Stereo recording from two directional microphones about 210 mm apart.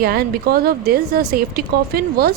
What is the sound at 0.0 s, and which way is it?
A woman's voice, 45° right (ahead or behind).